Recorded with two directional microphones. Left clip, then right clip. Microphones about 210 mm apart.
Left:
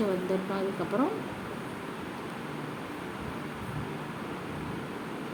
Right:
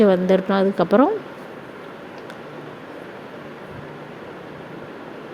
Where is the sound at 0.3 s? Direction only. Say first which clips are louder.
Right 13 dB; 35° right (ahead or behind).